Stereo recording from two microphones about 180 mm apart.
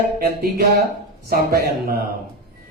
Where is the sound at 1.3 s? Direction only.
60° right (ahead or behind).